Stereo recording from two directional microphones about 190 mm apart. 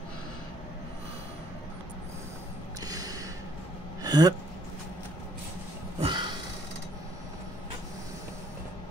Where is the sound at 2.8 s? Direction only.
20° right (ahead or behind).